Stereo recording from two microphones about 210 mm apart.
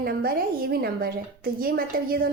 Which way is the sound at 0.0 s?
50° right (ahead or behind).